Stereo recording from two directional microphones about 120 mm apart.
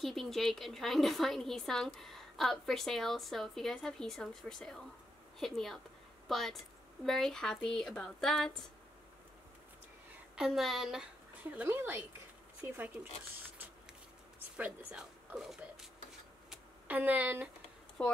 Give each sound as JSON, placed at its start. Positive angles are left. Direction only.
{"t": 0.0, "sound": "a woman's voice", "side_deg": 0}
{"t": 10.3, "sound": "a woman's voice", "side_deg": 0}
{"t": 11.5, "sound": "speech", "side_deg": -15}
{"t": 14.6, "sound": "speech", "side_deg": -10}
{"t": 16.4, "sound": "a sound", "side_deg": -15}
{"t": 18.0, "sound": "speech", "side_deg": 10}